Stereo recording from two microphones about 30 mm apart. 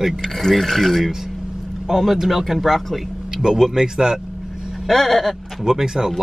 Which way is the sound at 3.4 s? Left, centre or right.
Centre.